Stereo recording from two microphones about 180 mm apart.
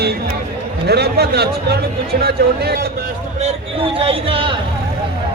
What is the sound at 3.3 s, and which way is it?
A man's voice, 35° right (ahead or behind).